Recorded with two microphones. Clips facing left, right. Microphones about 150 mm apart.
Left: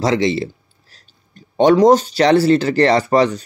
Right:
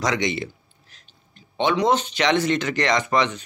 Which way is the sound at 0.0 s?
30° left (ahead or behind).